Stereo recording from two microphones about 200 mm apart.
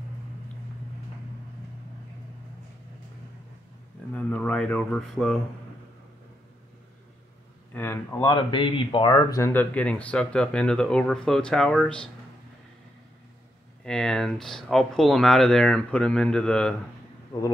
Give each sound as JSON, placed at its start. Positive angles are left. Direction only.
{"t": 4.1, "sound": "speech", "side_deg": 5}
{"t": 7.7, "sound": "speech", "side_deg": 10}
{"t": 13.8, "sound": "speech", "side_deg": 5}